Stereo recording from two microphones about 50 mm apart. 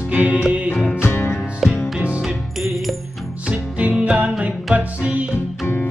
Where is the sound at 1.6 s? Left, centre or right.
Centre.